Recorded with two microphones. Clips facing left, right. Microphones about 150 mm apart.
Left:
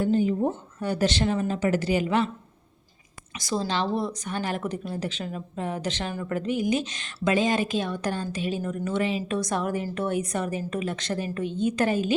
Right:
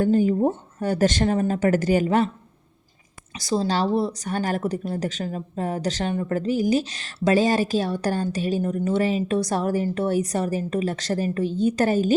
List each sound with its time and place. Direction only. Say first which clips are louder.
0.0 s a woman's voice: right 4 dB; 45° right (ahead or behind)
3.3 s speech: right 4 dB; 30° right (ahead or behind)